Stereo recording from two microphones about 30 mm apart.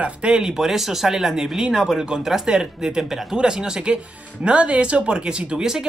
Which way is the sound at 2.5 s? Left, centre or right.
Right.